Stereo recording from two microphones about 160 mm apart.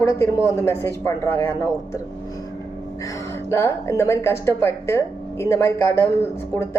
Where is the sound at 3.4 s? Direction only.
15° left (ahead or behind).